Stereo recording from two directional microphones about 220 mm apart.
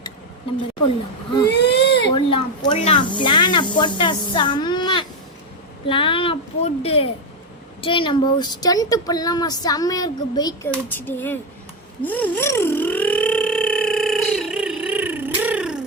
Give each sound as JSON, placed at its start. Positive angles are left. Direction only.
{"t": 1.5, "sound": "baby cry", "side_deg": 50}
{"t": 2.1, "sound": "speech", "side_deg": 20}
{"t": 12.0, "sound": "telephone", "side_deg": 5}